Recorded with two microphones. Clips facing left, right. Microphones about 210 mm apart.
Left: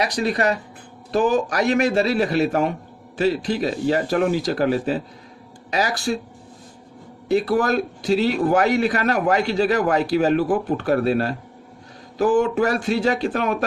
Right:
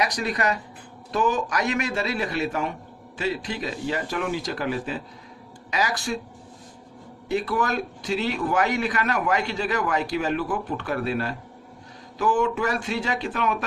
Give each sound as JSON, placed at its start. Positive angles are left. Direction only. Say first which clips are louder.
{"t": 0.0, "sound": "a man's voice", "louder": "left 4 dB", "side_deg": 30}
{"t": 7.3, "sound": "a man's voice", "louder": "left 6 dB", "side_deg": 35}